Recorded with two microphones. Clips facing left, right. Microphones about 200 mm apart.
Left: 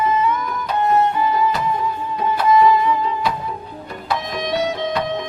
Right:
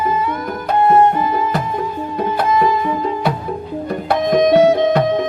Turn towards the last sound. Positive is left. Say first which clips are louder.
# right 10 dB
turn(degrees=-50)  # may be behind; listen again after turning